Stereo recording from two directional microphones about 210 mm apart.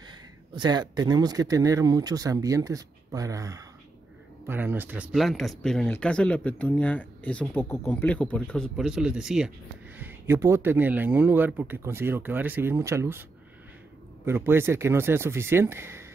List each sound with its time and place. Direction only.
0.6 s speech: 20° right (ahead or behind)
14.2 s speech: 10° right (ahead or behind)